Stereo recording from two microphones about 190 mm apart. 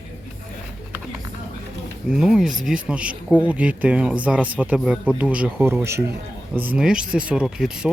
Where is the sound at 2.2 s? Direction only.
Centre (ahead or behind).